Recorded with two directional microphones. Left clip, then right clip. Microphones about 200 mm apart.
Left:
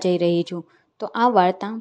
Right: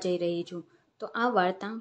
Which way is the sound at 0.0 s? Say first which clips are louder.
Left 9 dB; 30° left (ahead or behind).